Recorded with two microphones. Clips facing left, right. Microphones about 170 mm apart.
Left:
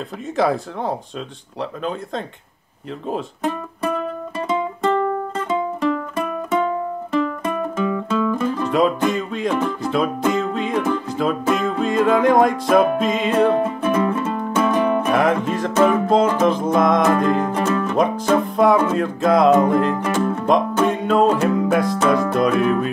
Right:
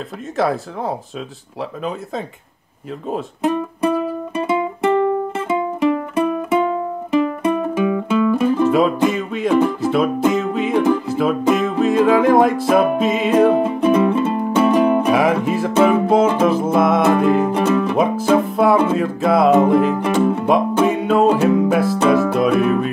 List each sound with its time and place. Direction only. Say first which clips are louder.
0.4 s music: even; centre (ahead or behind)
13.8 s music: right 7 dB; 20° right (ahead or behind)
15.0 s music: right 2 dB; 5° right (ahead or behind)